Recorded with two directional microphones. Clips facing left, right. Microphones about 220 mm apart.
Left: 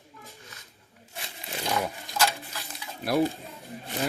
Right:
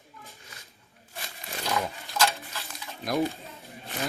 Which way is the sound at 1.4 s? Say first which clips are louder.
Left 1 dB; 15° left (ahead or behind).